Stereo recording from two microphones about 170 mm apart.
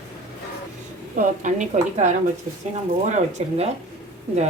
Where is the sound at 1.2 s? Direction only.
45° right (ahead or behind).